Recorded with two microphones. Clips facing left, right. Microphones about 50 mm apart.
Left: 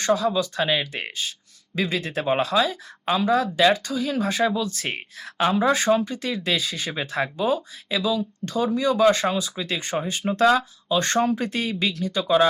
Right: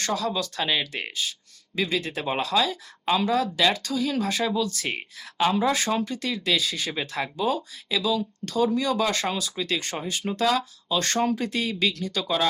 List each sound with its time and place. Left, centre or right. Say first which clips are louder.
0.0 s speech: left 5 dB; left
1.7 s speech: left 2 dB; left